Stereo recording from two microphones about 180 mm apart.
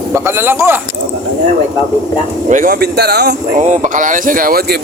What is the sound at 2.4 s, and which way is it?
Speech, 45° right (ahead or behind).